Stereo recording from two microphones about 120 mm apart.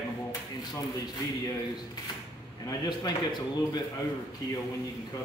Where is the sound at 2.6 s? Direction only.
35° left (ahead or behind).